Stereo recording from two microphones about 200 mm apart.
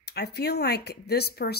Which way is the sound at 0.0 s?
55° left (ahead or behind).